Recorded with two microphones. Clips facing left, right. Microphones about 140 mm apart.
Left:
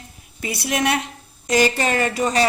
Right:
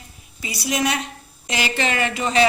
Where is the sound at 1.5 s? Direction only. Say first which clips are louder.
Left 5 dB; 40° left (ahead or behind).